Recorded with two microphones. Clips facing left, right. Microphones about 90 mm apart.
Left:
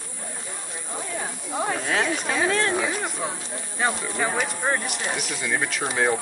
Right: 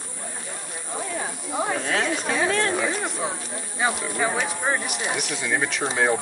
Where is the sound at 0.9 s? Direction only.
15° right (ahead or behind).